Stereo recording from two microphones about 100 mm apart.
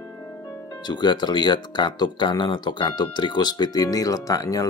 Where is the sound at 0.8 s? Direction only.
45° left (ahead or behind).